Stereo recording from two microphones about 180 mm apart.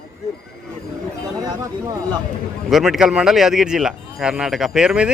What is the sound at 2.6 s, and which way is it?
Speech, centre (ahead or behind).